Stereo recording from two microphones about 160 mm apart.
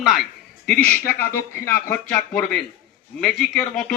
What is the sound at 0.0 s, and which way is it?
A man's voice, centre (ahead or behind).